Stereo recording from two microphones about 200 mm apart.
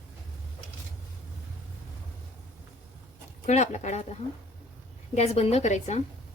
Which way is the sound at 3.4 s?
35° left (ahead or behind).